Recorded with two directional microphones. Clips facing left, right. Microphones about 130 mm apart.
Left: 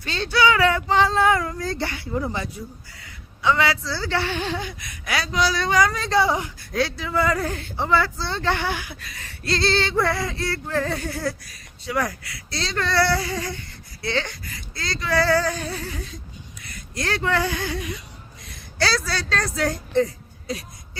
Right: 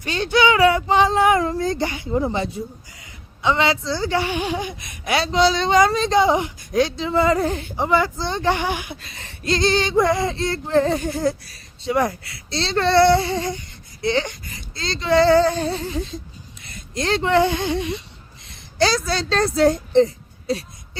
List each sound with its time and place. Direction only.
0.0 s a woman's voice: 15° right (ahead or behind)
16.6 s a sound: 25° right (ahead or behind)
18.4 s a woman's voice: 25° right (ahead or behind)